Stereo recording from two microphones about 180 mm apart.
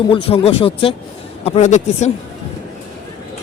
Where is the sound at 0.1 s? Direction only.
30° left (ahead or behind).